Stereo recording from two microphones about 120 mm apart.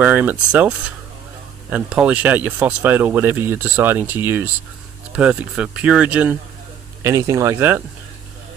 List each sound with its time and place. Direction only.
0.0 s speech: 15° right (ahead or behind)
7.0 s speech: 25° right (ahead or behind)